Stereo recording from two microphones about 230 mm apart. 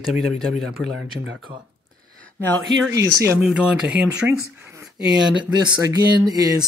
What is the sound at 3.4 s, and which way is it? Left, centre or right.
Speech, centre.